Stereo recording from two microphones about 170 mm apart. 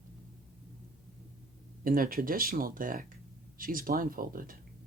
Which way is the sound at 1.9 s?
55° right (ahead or behind).